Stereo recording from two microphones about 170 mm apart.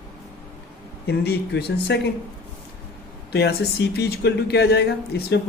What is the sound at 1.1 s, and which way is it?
Speech, 70° left (ahead or behind).